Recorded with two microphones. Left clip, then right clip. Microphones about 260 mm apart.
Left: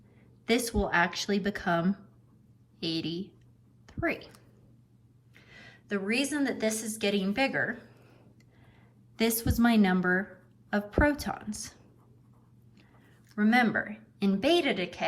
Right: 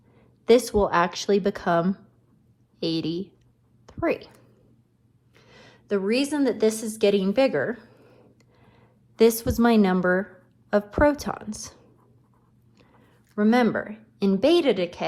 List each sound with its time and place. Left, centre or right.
0.2 s speech: centre
5.3 s a woman's voice: centre
8.7 s a woman's voice: right
12.7 s speech: right